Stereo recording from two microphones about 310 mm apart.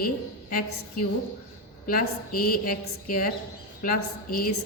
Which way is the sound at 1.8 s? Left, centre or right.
Left.